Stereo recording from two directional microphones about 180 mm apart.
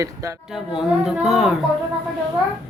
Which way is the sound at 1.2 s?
Centre (ahead or behind).